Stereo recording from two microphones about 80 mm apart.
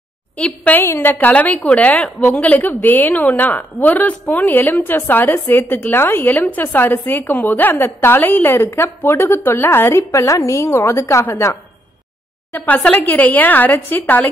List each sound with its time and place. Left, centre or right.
0.4 s a woman's voice: centre
12.5 s a woman's voice: left